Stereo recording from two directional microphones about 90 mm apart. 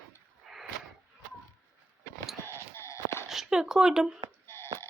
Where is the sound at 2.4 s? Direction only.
30° left (ahead or behind).